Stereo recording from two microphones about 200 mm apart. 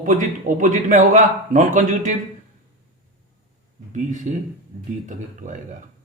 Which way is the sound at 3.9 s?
35° right (ahead or behind).